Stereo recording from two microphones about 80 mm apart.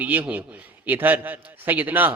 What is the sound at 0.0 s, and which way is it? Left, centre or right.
A man's voice, centre.